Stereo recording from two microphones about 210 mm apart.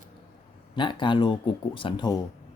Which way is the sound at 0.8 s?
25° left (ahead or behind).